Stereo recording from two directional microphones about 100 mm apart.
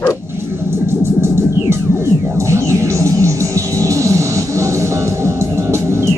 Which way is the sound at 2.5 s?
30° right (ahead or behind).